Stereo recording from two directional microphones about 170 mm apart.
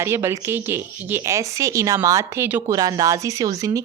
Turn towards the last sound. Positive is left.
turn(degrees=-20)  # may be behind; listen again after turning